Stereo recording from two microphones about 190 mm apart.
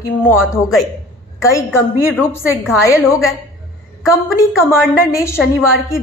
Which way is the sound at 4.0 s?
15° left (ahead or behind).